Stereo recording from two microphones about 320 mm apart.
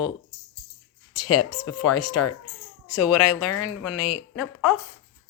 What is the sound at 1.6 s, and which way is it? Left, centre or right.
Speech, left.